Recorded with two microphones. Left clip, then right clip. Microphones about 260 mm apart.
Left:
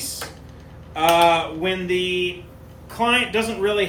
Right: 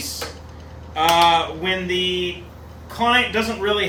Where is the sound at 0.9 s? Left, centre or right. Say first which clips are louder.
Right 1 dB; left.